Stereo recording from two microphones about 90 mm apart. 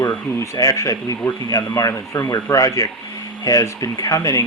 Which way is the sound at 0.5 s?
45° left (ahead or behind).